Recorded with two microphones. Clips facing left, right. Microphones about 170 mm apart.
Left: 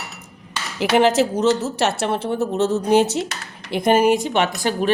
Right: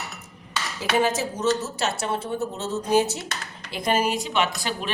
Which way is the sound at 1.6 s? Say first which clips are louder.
Left 6 dB; 70° left (ahead or behind).